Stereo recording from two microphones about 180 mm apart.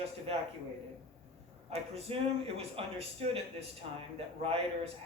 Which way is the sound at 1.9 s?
30° right (ahead or behind).